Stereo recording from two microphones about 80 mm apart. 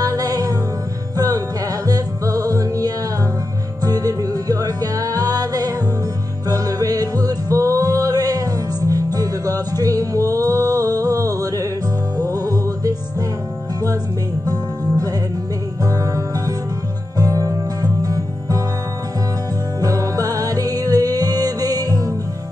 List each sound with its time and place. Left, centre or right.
0.0 s music: right
14.4 s music: right
19.8 s music: right